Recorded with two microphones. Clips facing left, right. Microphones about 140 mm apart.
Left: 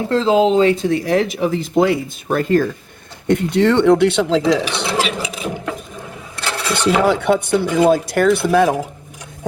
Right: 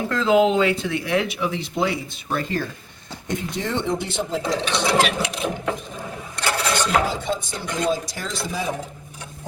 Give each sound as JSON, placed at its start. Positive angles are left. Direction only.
{"t": 0.1, "sound": "speech", "side_deg": 30}
{"t": 3.2, "sound": "speech", "side_deg": 65}
{"t": 4.9, "sound": "a sound", "side_deg": 0}
{"t": 7.0, "sound": "speech", "side_deg": 65}